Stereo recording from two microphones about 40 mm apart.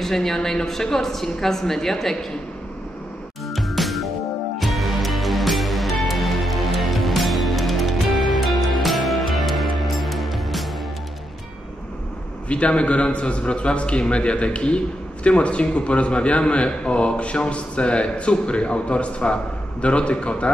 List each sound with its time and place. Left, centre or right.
0.0 s a woman's voice: centre
3.4 s music: centre
12.4 s a man's voice: left